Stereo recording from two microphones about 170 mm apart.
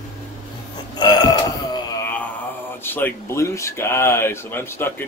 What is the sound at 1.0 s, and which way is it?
Burping, 25° left (ahead or behind).